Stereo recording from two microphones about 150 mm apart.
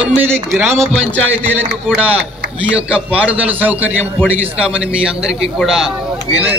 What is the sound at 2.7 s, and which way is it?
A man's voice, 10° right (ahead or behind).